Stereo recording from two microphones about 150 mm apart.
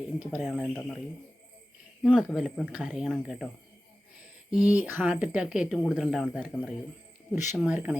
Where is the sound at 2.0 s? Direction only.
Centre (ahead or behind).